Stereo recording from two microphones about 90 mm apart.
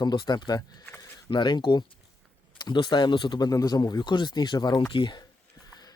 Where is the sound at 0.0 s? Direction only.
55° left (ahead or behind).